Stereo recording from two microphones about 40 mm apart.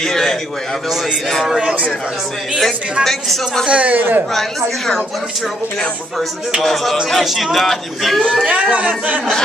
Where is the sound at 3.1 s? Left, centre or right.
Centre.